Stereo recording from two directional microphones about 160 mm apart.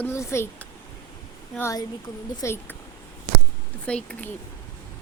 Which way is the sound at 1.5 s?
15° left (ahead or behind).